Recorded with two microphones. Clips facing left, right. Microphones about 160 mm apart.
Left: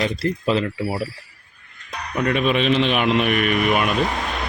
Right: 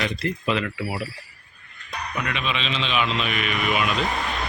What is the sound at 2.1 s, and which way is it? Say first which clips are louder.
A man's voice: left 9 dB; 45° left (ahead or behind).